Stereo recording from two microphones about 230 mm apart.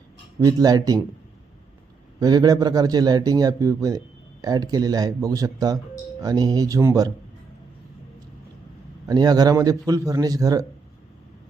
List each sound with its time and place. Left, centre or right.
0.3 s a man's voice: centre
2.1 s a man's voice: centre
9.0 s a man's voice: centre